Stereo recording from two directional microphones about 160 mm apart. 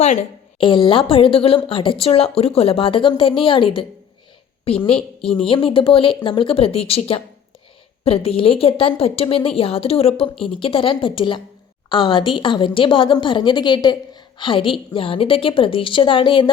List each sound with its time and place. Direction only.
0.0 s a woman's voice: 45° left (ahead or behind)
0.6 s a woman's voice: 30° left (ahead or behind)